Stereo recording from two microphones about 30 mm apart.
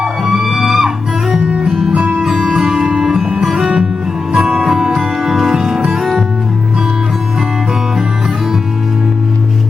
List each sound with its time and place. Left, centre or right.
0.3 s music: centre
2.0 s music: right
2.3 s music: centre